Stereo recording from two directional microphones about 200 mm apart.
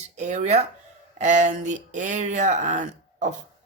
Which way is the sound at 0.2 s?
35° right (ahead or behind).